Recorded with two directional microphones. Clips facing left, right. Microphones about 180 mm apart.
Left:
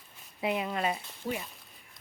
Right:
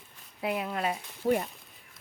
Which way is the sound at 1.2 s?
55° right (ahead or behind).